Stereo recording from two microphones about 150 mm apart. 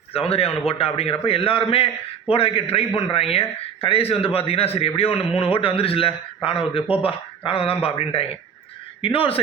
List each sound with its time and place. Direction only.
0.1 s a man's voice: 40° left (ahead or behind)